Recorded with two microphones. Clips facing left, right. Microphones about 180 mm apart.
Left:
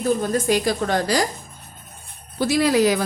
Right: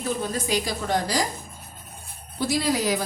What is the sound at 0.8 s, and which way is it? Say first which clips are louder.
Speech: left 4 dB; 75° left (ahead or behind).